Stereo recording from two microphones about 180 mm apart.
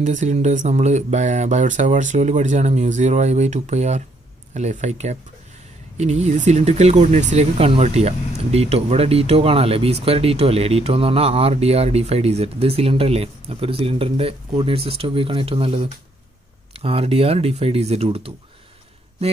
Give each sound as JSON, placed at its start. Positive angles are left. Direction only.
{"t": 0.0, "sound": "speech", "side_deg": -40}